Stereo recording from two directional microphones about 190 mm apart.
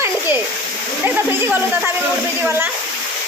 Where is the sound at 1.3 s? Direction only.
10° right (ahead or behind).